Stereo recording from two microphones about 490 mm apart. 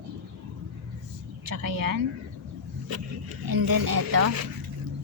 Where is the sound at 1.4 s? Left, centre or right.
Right.